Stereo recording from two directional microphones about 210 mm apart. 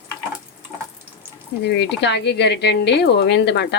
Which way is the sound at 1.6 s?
55° left (ahead or behind).